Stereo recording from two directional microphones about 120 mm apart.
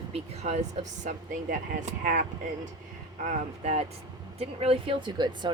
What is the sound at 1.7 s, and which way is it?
Speech, 90° right.